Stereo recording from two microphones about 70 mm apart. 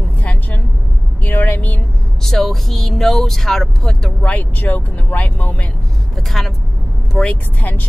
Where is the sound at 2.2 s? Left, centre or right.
Centre.